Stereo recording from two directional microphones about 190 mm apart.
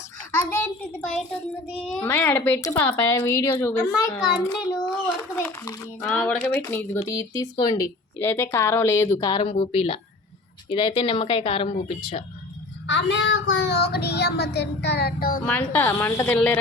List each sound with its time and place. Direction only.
0.3 s a child's voice: 10° left (ahead or behind); by 12.2 s 35° left (ahead or behind)
12.9 s child singing: 70° left (ahead or behind); by 15.4 s 55° left (ahead or behind)
15.7 s a child's voice: 10° left (ahead or behind)